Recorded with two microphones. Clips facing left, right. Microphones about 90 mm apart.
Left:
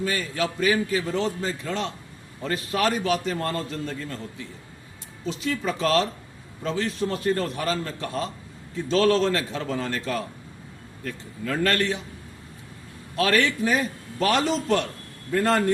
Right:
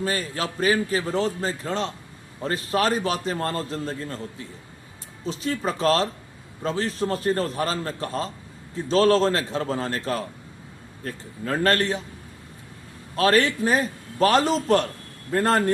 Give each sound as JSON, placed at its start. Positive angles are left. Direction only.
{"t": 0.0, "sound": "a man's voice", "side_deg": -35}
{"t": 13.1, "sound": "a man's voice", "side_deg": -35}